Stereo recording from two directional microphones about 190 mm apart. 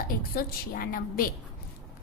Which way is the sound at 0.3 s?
50° left (ahead or behind).